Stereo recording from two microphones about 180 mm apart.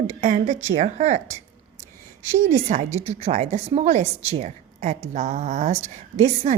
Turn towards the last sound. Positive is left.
turn(degrees=-35)  # may be behind; listen again after turning